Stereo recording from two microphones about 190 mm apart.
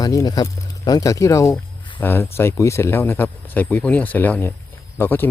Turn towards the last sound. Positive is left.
turn(degrees=10)  # may be behind; listen again after turning